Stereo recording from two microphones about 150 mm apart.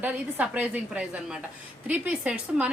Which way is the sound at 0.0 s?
10° right (ahead or behind).